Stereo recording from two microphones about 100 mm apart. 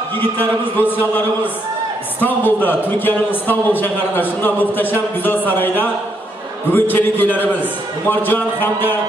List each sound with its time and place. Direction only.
0.2 s a man's voice: 20° left (ahead or behind)